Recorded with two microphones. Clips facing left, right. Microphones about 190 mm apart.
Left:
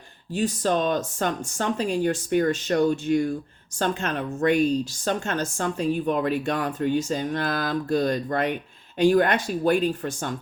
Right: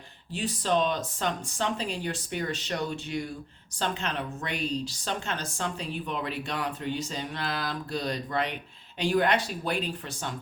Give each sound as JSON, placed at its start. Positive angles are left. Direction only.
{"t": 0.3, "sound": "speech", "side_deg": 45}